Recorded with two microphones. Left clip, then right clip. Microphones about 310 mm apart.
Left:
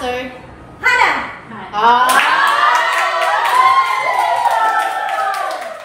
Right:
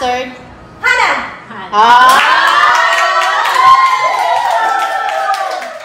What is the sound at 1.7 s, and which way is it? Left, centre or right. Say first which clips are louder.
Child singing: right 6 dB; right.